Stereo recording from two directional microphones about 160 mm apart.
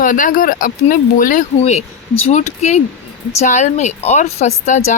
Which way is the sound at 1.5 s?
40° left (ahead or behind).